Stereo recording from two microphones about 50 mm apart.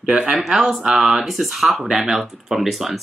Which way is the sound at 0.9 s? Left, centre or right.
Centre.